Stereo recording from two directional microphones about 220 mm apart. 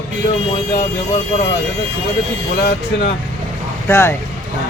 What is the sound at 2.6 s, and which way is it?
Speech, 50° left (ahead or behind).